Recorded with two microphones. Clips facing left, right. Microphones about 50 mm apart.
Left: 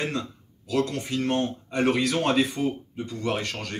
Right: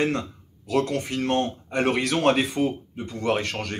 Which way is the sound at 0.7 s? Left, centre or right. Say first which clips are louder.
Right 2 dB; right.